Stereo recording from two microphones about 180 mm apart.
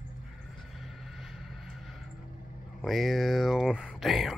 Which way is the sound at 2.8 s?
Centre (ahead or behind).